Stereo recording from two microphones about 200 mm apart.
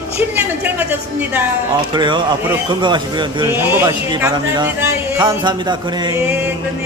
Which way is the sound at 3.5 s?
10° right (ahead or behind).